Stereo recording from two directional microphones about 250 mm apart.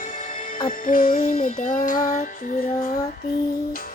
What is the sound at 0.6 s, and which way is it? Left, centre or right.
Music, left.